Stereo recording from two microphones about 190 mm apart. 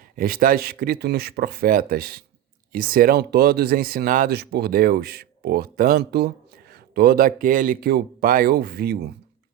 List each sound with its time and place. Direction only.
0.2 s speech: 50° right (ahead or behind)